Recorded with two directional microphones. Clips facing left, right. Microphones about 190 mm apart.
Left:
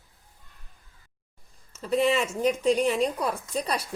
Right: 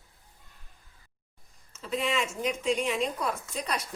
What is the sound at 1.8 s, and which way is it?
Speech, 40° left (ahead or behind).